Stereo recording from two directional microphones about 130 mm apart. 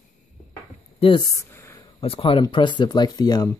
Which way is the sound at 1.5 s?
15° left (ahead or behind).